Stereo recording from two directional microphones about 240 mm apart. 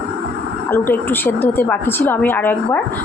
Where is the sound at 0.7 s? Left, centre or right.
Centre.